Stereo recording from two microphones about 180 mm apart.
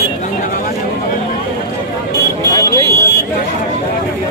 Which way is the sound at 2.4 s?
20° left (ahead or behind).